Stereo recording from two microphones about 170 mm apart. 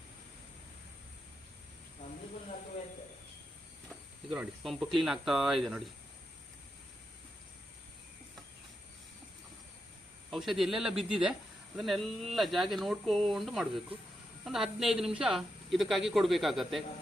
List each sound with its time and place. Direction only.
3.8 s speech: centre (ahead or behind)
10.3 s a woman's voice: centre (ahead or behind)